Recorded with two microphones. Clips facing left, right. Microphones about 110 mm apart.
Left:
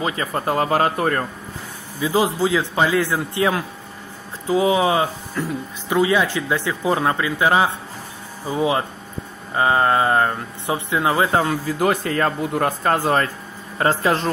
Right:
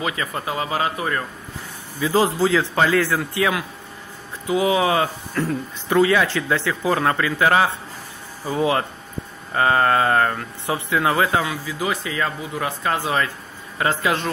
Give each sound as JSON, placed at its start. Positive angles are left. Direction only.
{"t": 0.0, "sound": "speech", "side_deg": 35}
{"t": 2.0, "sound": "speech", "side_deg": 20}
{"t": 5.3, "sound": "speech", "side_deg": 10}
{"t": 11.3, "sound": "speech", "side_deg": 45}